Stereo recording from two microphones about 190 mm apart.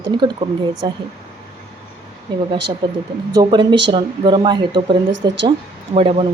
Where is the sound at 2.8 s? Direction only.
20° right (ahead or behind).